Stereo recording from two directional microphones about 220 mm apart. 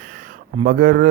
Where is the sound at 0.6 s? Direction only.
40° right (ahead or behind).